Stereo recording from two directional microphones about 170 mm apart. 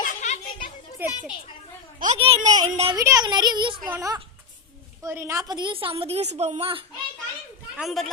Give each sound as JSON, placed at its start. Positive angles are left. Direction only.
{"t": 0.0, "sound": "a sound", "side_deg": 45}
{"t": 1.0, "sound": "a child's voice", "side_deg": -10}
{"t": 2.1, "sound": "a woman's voice", "side_deg": -35}
{"t": 2.9, "sound": "a child's voice", "side_deg": -20}
{"t": 7.8, "sound": "speech", "side_deg": 0}